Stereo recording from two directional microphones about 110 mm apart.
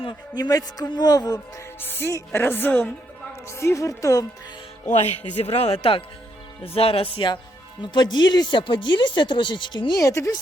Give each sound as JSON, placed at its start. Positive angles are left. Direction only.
{"t": 0.0, "sound": "a man's voice", "side_deg": 40}
{"t": 1.8, "sound": "a woman's voice", "side_deg": 20}
{"t": 4.9, "sound": "speech", "side_deg": 90}
{"t": 10.0, "sound": "a woman's voice", "side_deg": 30}